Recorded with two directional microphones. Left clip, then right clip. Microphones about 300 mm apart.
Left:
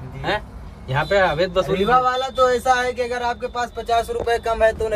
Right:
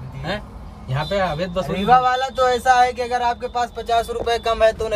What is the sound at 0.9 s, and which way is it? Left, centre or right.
Speech, centre.